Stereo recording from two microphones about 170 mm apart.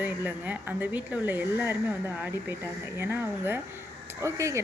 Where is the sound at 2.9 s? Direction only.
15° right (ahead or behind).